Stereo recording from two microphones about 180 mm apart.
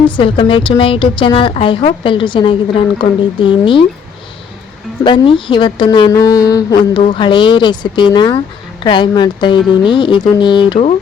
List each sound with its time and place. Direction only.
0.0 s speech: 30° left (ahead or behind)
5.0 s speech: 25° left (ahead or behind)